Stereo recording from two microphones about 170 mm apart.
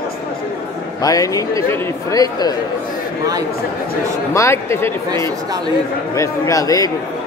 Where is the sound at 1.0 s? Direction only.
20° left (ahead or behind).